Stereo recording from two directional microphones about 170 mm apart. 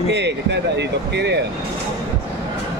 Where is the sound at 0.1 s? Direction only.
90° right.